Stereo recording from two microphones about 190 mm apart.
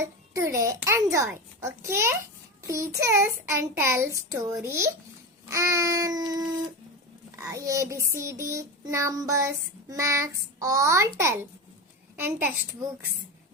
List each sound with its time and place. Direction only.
0.0 s a child's voice: 15° right (ahead or behind)
7.4 s a child's voice: 15° right (ahead or behind)
12.1 s a child's voice: 10° right (ahead or behind)